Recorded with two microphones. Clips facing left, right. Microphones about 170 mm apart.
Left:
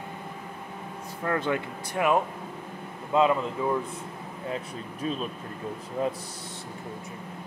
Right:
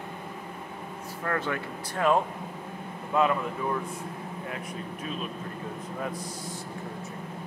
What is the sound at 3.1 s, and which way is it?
Speech, 20° left (ahead or behind).